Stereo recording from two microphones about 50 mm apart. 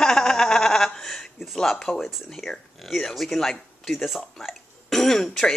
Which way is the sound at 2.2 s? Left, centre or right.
Centre.